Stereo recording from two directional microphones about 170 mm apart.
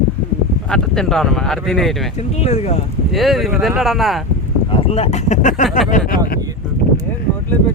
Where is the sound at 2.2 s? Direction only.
40° left (ahead or behind).